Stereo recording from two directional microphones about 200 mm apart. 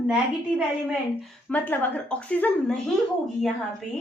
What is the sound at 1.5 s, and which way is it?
A woman's voice, 10° left (ahead or behind).